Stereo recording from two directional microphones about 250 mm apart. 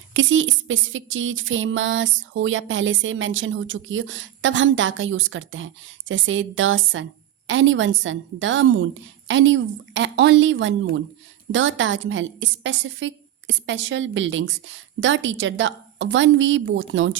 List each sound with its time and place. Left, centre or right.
0.1 s speech: right